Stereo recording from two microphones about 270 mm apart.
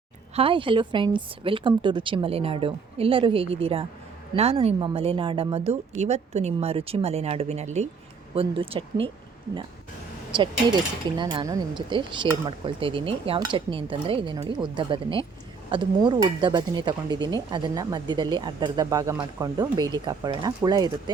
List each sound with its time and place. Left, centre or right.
0.3 s a woman's voice: centre
10.3 s a woman's voice: centre